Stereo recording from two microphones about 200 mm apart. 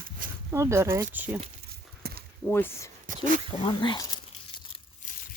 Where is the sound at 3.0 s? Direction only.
40° right (ahead or behind).